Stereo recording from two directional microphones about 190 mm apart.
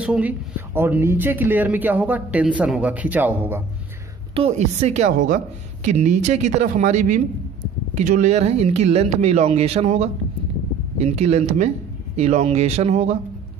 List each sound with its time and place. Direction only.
0.0 s speech: 5° right (ahead or behind)
4.4 s speech: 35° right (ahead or behind)